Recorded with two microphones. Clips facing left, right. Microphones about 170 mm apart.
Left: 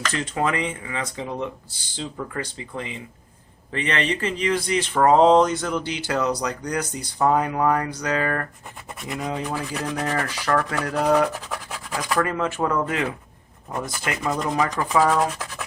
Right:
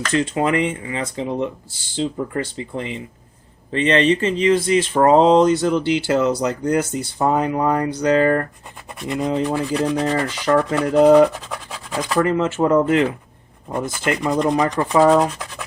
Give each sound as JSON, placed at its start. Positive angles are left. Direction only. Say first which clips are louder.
{"t": 0.1, "sound": "speech", "louder": "right 7 dB", "side_deg": -20}